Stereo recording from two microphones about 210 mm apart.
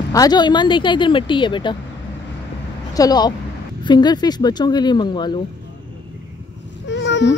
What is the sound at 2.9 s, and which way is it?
Speech, 20° left (ahead or behind).